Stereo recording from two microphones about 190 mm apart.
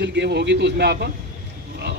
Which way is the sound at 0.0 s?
65° right (ahead or behind).